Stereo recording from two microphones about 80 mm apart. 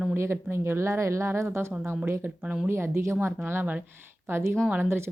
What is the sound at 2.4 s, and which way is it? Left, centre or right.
Speech, centre.